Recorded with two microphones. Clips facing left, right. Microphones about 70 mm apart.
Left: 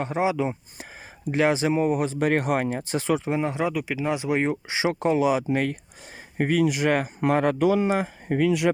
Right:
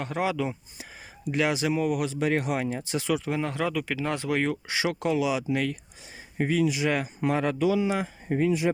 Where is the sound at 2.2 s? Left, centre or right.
Left.